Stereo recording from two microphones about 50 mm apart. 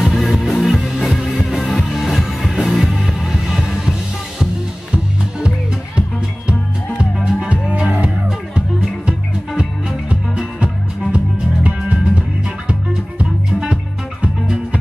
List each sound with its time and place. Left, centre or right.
0.0 s music: centre
7.3 s music: right
10.0 s music: right
13.5 s music: centre
14.2 s music: right